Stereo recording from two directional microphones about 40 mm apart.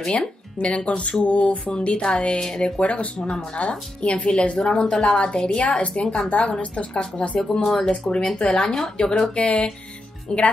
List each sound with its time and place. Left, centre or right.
0.6 s a woman's voice: left
1.2 s music: left
2.0 s a woman's voice: left
2.6 s music: left
3.3 s a woman's voice: left
6.2 s music: left
6.6 s a woman's voice: left
7.6 s speech: centre
7.9 s a woman's voice: left
9.3 s a woman's voice: left